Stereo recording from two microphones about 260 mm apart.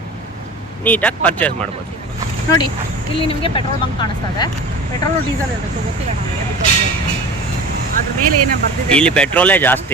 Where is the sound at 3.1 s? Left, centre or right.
Left.